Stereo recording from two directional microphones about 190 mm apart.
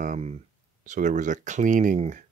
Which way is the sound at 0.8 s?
40° right (ahead or behind).